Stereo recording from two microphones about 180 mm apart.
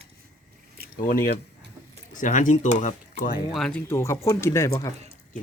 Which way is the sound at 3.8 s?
15° left (ahead or behind).